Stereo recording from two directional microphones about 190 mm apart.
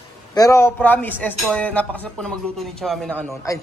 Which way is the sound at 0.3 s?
15° left (ahead or behind).